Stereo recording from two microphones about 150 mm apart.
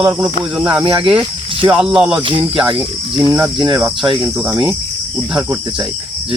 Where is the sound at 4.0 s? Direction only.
30° right (ahead or behind).